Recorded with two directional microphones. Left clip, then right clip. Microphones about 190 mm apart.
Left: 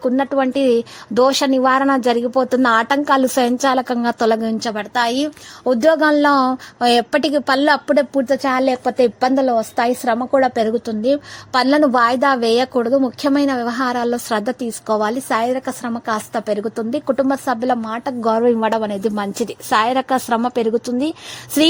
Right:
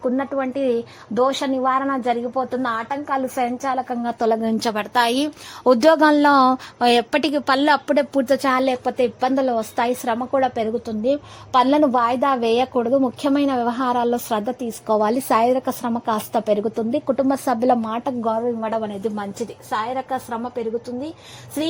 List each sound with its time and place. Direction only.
0.0 s a woman's voice: 25° left (ahead or behind); by 3.7 s 45° left (ahead or behind)
3.7 s a woman's voice: 35° left (ahead or behind)
4.0 s a woman's voice: 20° left (ahead or behind)
4.4 s a woman's voice: centre (ahead or behind)
5.6 s a woman's voice: 5° right (ahead or behind); by 11.2 s 20° left (ahead or behind)
11.5 s a woman's voice: 10° left (ahead or behind)
15.0 s a woman's voice: 5° right (ahead or behind)
18.3 s a woman's voice: 30° left (ahead or behind)
19.7 s a woman's voice: 40° left (ahead or behind)